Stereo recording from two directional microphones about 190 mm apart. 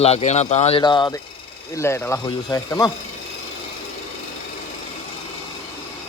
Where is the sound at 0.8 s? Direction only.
25° left (ahead or behind).